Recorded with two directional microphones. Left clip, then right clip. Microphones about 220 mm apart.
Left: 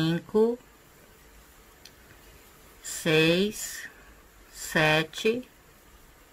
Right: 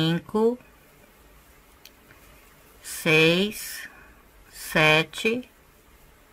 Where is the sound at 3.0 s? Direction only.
15° right (ahead or behind).